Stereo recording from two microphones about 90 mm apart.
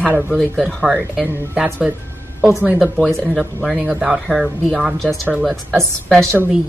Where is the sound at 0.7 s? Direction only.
10° left (ahead or behind).